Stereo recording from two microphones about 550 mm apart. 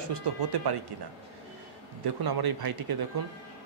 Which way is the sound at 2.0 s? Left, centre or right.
Right.